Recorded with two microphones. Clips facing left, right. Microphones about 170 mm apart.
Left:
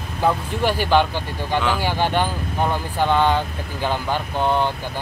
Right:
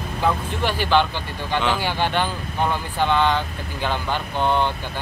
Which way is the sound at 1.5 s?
5° left (ahead or behind).